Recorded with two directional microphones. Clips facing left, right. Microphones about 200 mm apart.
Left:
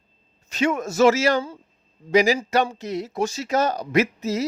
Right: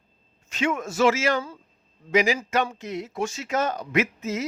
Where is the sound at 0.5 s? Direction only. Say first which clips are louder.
Left 4 dB; 40° left (ahead or behind).